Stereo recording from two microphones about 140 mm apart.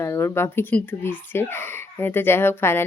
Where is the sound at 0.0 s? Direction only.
20° left (ahead or behind).